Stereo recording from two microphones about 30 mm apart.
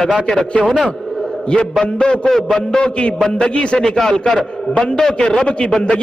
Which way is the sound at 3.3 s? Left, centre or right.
Left.